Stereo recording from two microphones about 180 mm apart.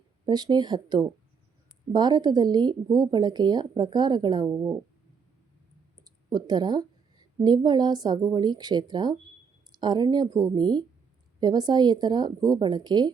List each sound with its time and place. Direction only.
0.3 s speech: 25° right (ahead or behind)
4.5 s speech: 10° right (ahead or behind)
6.3 s a woman's voice: 25° right (ahead or behind)